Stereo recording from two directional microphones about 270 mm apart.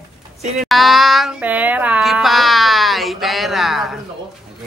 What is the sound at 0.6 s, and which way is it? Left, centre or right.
Child singing, centre.